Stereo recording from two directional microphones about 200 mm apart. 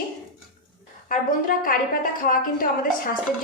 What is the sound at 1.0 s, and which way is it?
A woman's voice, 45° left (ahead or behind).